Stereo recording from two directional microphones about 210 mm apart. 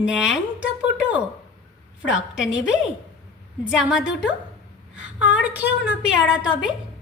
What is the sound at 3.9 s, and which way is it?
Speech, 5° right (ahead or behind).